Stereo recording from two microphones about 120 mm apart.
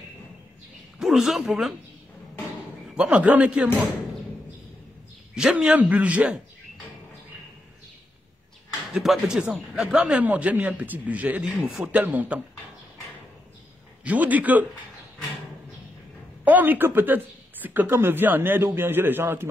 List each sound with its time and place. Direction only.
0.9 s speech: 5° right (ahead or behind)
2.9 s a man's voice: 5° right (ahead or behind)
5.3 s a man's voice: 5° right (ahead or behind)
8.9 s a man's voice: 5° right (ahead or behind)
14.0 s a man's voice: 15° right (ahead or behind)
16.4 s a man's voice: 15° right (ahead or behind)